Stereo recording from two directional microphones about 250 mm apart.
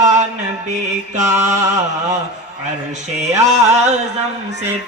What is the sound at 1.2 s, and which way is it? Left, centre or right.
Mantra, centre.